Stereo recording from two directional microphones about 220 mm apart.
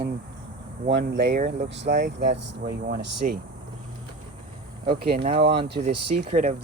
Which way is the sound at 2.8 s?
40° right (ahead or behind).